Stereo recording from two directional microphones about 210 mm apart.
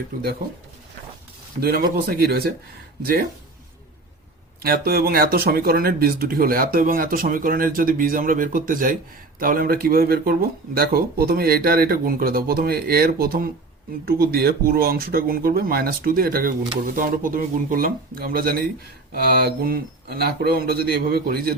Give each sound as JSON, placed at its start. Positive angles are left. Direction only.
{"t": 1.6, "sound": "speech", "side_deg": -45}
{"t": 4.6, "sound": "speech", "side_deg": -45}